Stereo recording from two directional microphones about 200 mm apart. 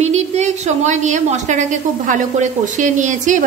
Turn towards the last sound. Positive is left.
turn(degrees=-40)  # may be behind; listen again after turning